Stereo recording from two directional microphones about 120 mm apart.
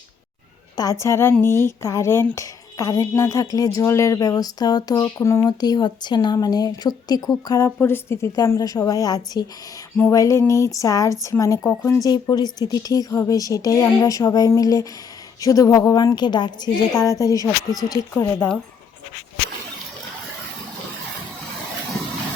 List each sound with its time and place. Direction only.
0.8 s speech: 25° left (ahead or behind)
5.5 s speech: 35° left (ahead or behind)
7.8 s speech: 20° left (ahead or behind)
12.0 s speech: 35° left (ahead or behind)
18.1 s speech: 20° left (ahead or behind)